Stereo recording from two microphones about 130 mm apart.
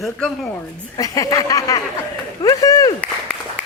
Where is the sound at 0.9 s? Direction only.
30° left (ahead or behind).